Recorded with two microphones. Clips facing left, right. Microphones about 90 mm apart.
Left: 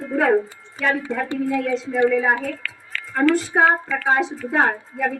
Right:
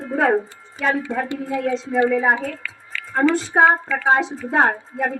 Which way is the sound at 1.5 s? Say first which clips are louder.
Even; 25° right (ahead or behind).